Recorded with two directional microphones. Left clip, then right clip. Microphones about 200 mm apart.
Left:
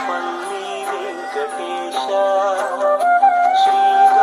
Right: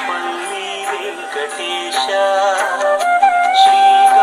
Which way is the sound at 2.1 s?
50° left (ahead or behind).